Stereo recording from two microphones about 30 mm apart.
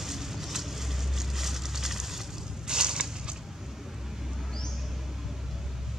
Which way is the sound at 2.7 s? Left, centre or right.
Right.